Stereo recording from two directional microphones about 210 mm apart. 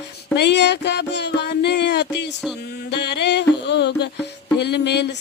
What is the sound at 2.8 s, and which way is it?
Music, 55° left (ahead or behind).